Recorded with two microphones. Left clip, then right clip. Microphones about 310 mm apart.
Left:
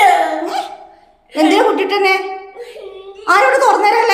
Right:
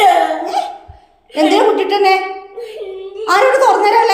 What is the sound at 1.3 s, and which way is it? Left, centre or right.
A woman's voice, centre.